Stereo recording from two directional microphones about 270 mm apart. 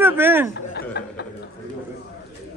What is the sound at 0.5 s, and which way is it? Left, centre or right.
Chuckle, left.